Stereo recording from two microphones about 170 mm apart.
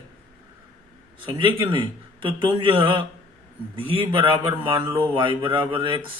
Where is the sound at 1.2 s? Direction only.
30° right (ahead or behind).